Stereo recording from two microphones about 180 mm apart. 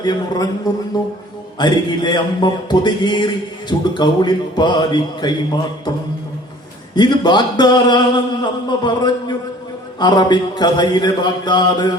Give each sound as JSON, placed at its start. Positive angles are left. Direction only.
{"t": 0.0, "sound": "speech", "side_deg": 25}
{"t": 6.9, "sound": "speech", "side_deg": 25}